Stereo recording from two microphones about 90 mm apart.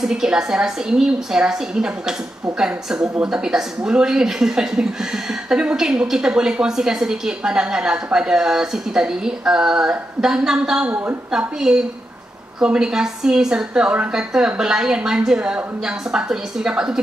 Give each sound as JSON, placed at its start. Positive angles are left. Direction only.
{"t": 0.0, "sound": "speech", "side_deg": -10}
{"t": 10.9, "sound": "a woman's voice", "side_deg": -20}
{"t": 11.3, "sound": "speech", "side_deg": -10}